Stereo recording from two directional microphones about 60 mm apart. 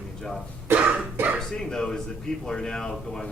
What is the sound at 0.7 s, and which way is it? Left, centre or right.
Cough, right.